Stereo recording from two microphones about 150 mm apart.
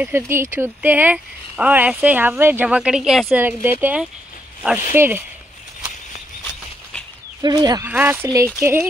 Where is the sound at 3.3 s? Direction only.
15° right (ahead or behind).